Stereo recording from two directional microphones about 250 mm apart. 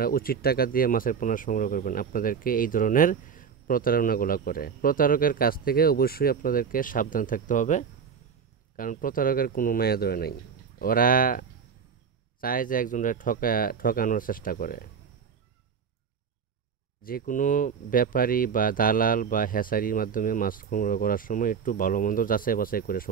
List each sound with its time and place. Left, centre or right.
0.0 s speech: left
17.0 s speech: left